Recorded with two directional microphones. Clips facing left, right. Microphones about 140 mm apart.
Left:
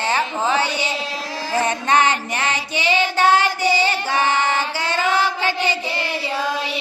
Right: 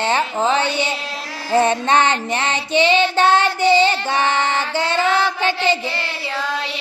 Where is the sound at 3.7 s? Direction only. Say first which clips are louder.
Right 4 dB; 25° right (ahead or behind).